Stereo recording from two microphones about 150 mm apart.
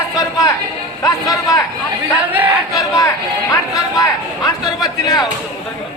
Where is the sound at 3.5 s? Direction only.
25° left (ahead or behind).